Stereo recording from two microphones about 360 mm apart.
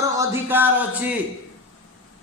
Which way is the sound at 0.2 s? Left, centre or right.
Centre.